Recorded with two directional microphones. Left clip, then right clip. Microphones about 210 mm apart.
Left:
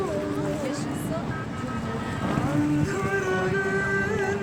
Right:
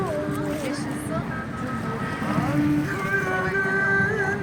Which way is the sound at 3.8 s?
15° left (ahead or behind).